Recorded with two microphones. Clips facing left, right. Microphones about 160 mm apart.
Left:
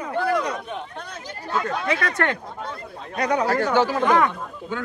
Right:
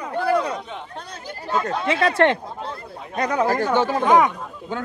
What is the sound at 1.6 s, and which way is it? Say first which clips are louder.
Speech: right 5 dB; 30° right (ahead or behind).